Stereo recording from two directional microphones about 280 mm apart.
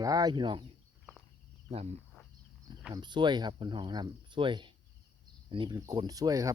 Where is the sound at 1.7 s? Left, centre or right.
Right.